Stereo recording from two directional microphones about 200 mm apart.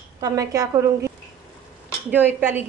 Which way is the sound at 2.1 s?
10° right (ahead or behind).